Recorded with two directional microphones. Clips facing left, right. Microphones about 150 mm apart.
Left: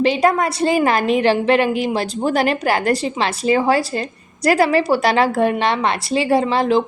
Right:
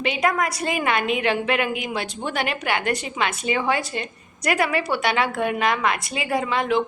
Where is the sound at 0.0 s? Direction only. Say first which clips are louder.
Left 7 dB; 35° left (ahead or behind).